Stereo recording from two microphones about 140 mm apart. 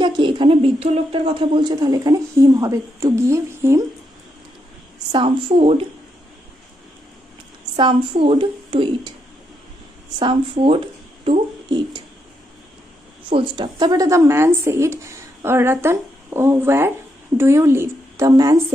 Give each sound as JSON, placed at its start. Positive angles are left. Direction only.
{"t": 0.0, "sound": "speech", "side_deg": -35}
{"t": 5.1, "sound": "speech", "side_deg": -40}
{"t": 7.7, "sound": "speech", "side_deg": -35}
{"t": 10.1, "sound": "speech", "side_deg": -40}
{"t": 13.3, "sound": "speech", "side_deg": -35}